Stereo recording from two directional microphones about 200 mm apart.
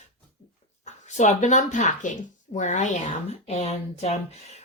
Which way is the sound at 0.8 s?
35° left (ahead or behind).